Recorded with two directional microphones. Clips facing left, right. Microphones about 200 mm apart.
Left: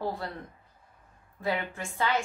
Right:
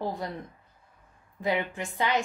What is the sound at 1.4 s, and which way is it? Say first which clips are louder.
Speech: right 3 dB; 15° right (ahead or behind).